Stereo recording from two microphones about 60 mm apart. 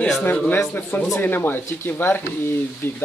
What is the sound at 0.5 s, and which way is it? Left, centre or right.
Speech, left.